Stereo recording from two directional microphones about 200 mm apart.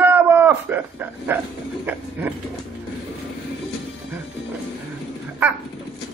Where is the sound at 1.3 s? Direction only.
10° right (ahead or behind).